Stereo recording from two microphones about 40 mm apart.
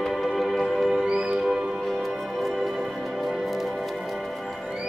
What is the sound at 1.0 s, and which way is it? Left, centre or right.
Music, centre.